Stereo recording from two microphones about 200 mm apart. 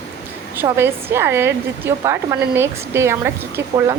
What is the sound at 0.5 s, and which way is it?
A woman's voice, 10° right (ahead or behind).